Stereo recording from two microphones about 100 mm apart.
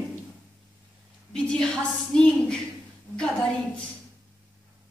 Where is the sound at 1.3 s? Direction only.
10° left (ahead or behind).